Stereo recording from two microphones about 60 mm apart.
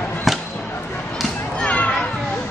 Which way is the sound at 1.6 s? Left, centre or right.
Left.